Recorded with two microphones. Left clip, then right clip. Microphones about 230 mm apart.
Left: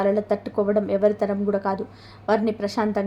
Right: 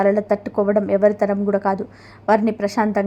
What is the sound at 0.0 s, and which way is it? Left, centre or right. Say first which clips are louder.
A woman's voice: right 4 dB; centre.